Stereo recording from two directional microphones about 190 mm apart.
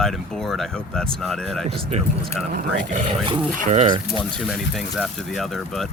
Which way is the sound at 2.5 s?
45° right (ahead or behind).